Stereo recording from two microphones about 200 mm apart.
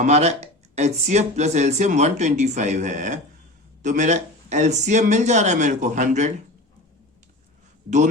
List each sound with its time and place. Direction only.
0.0 s speech: 35° right (ahead or behind)